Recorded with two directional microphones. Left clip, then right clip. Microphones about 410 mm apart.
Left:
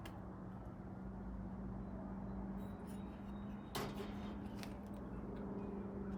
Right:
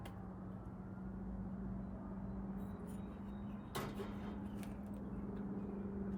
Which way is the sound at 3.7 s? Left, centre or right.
Centre.